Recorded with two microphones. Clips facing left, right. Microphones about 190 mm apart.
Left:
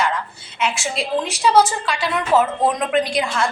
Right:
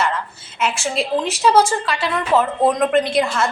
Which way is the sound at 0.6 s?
Centre (ahead or behind).